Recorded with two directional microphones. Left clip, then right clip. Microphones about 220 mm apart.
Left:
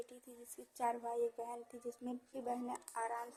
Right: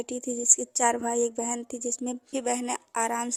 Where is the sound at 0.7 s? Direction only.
45° right (ahead or behind).